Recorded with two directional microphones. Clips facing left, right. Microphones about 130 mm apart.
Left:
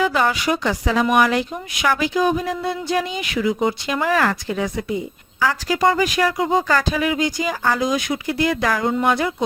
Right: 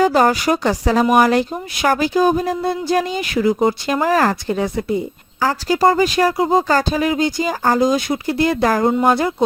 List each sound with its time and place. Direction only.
0.0 s speech: 40° right (ahead or behind)